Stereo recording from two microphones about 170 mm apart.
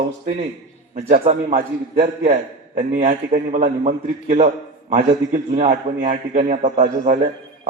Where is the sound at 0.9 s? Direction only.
45° right (ahead or behind).